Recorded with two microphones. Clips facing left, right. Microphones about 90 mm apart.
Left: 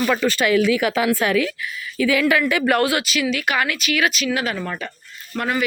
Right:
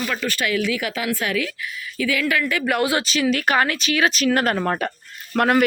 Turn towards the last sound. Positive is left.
turn(degrees=-55)  # may be behind; listen again after turning